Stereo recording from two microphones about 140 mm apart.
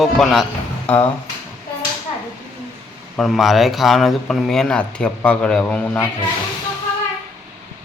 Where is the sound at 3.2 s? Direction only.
Centre (ahead or behind).